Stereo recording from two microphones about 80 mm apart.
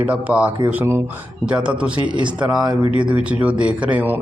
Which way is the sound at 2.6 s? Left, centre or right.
Right.